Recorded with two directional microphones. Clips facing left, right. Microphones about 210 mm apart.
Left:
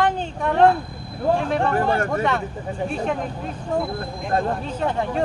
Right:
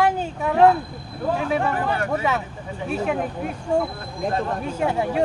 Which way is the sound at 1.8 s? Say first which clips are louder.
Left 3 dB; 45° left (ahead or behind).